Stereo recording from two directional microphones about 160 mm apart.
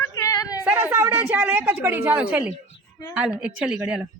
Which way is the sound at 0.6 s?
10° right (ahead or behind).